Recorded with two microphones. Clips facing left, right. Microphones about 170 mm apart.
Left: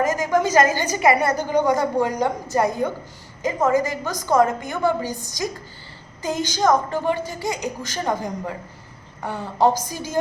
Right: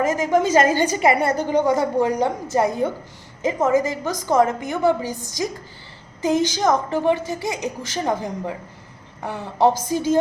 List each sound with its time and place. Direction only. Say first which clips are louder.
0.0 s a woman's voice: right 1 dB; 25° right (ahead or behind)
9.6 s a woman's voice: right 3 dB; 25° right (ahead or behind)